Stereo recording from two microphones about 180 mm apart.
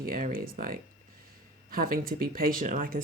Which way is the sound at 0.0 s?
50° right (ahead or behind).